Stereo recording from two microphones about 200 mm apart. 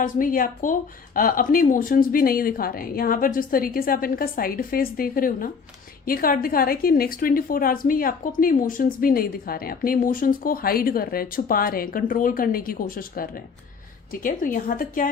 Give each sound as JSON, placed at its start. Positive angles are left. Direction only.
{"t": 0.0, "sound": "a woman's voice", "side_deg": 45}